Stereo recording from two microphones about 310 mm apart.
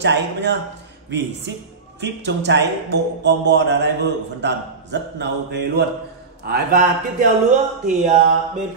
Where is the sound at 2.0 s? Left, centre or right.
Right.